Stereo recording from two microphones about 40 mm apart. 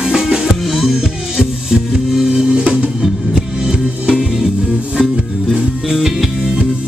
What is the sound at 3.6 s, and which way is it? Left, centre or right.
Music, centre.